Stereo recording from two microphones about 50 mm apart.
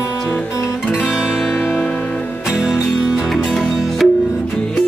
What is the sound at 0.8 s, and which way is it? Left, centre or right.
Guitar, centre.